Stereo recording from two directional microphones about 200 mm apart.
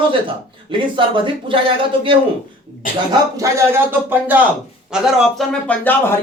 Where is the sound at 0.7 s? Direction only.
25° right (ahead or behind).